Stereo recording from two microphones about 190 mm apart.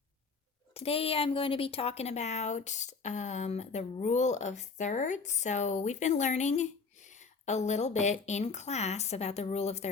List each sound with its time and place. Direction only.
0.7 s a woman's voice: 30° left (ahead or behind)